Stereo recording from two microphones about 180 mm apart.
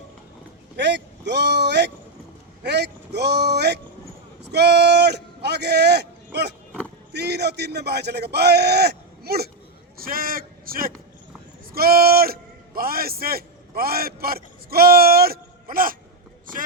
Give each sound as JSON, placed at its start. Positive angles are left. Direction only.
{"t": 0.8, "sound": "a man's voice", "side_deg": -75}